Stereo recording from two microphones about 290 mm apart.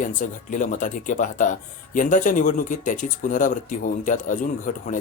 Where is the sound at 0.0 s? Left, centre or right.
Left.